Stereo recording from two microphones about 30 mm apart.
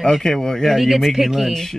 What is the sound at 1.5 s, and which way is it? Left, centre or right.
Speech, centre.